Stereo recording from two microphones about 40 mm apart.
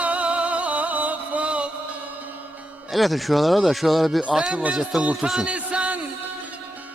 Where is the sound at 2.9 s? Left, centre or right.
Centre.